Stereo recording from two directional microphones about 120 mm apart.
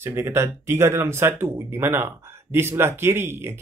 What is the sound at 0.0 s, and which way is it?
Speech, 20° right (ahead or behind).